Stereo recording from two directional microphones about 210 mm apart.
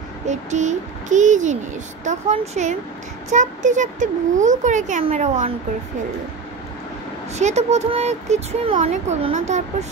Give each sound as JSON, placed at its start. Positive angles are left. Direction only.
{"t": 0.3, "sound": "speech", "side_deg": -35}
{"t": 7.3, "sound": "speech", "side_deg": -30}